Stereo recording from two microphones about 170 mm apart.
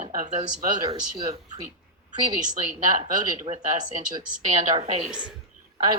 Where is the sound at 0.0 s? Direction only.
50° right (ahead or behind).